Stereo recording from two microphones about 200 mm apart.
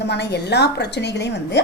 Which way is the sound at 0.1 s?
55° left (ahead or behind).